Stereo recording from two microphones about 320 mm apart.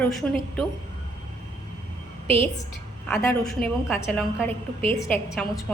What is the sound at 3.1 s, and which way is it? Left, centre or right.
A woman's voice, centre.